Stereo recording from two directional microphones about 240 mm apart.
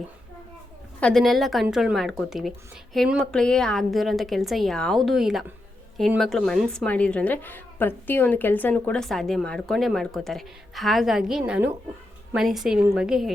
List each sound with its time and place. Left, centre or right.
0.9 s a woman's voice: centre